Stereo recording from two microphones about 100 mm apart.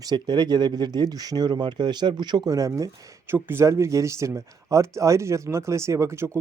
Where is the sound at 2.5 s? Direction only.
35° right (ahead or behind).